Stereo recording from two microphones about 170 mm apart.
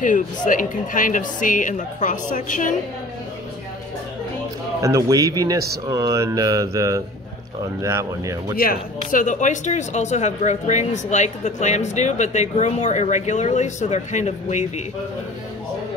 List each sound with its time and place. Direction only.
0.5 s speech: 50° left (ahead or behind)
4.8 s mantra: 20° right (ahead or behind)
7.8 s speech: 20° right (ahead or behind)
8.5 s speech: 55° left (ahead or behind)